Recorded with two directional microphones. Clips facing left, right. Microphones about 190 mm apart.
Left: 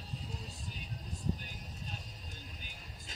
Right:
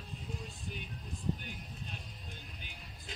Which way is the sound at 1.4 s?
40° left (ahead or behind).